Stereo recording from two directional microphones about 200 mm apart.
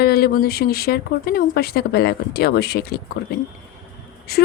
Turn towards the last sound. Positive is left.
turn(degrees=50)  # may be behind; listen again after turning